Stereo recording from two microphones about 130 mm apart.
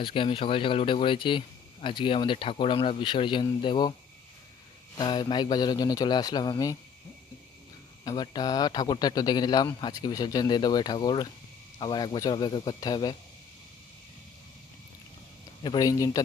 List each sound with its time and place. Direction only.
0.0 s speech: 40° left (ahead or behind)
4.9 s speech: 35° left (ahead or behind)
8.0 s speech: 35° left (ahead or behind)
15.6 s speech: 30° left (ahead or behind)